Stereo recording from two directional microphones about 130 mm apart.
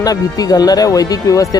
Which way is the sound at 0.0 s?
30° left (ahead or behind).